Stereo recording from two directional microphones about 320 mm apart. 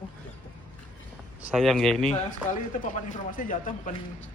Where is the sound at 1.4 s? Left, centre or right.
Centre.